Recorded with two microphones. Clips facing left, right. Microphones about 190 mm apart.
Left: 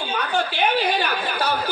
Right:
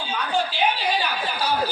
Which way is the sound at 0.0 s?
60° left (ahead or behind).